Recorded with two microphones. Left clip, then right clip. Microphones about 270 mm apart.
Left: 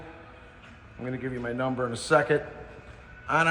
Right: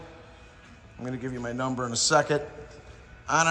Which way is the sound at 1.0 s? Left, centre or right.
Centre.